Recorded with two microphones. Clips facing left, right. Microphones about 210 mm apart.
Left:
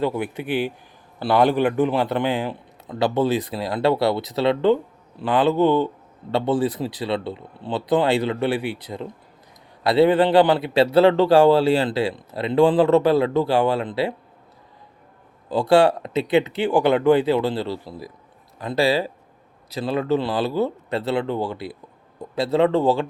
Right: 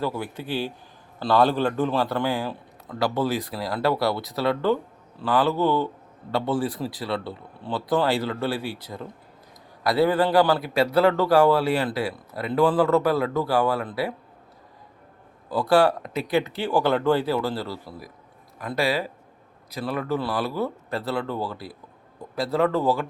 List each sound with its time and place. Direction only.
0.0 s a man's voice: 20° left (ahead or behind)
15.4 s a man's voice: 25° left (ahead or behind)